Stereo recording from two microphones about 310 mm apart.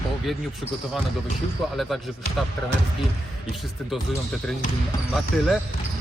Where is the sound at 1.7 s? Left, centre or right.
Centre.